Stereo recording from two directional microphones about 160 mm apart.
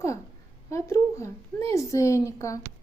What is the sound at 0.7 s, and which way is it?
A woman's voice, 20° left (ahead or behind).